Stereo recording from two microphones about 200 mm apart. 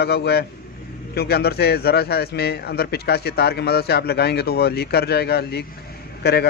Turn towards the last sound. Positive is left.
turn(degrees=55)  # may be behind; listen again after turning